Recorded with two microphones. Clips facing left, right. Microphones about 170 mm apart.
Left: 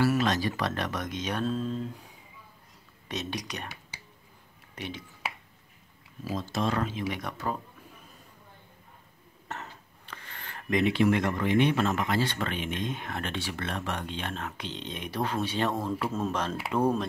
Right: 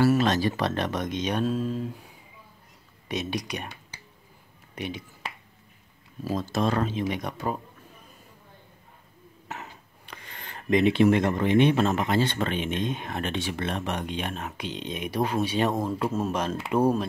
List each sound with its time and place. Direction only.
0.0 s speech: 30° right (ahead or behind); by 1.9 s 10° right (ahead or behind)
3.1 s speech: 10° right (ahead or behind)
4.7 s speech: 15° right (ahead or behind)
6.2 s speech: 40° right (ahead or behind)
6.9 s speech: 25° right (ahead or behind)
9.5 s speech: 10° right (ahead or behind)